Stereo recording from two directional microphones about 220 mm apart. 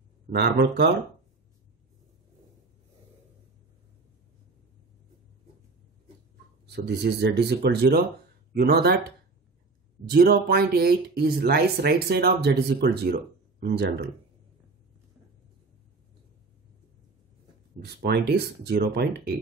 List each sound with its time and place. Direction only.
0.3 s speech: 50° right (ahead or behind)
6.7 s speech: 50° right (ahead or behind)
10.0 s speech: 45° right (ahead or behind)
17.7 s speech: 45° right (ahead or behind)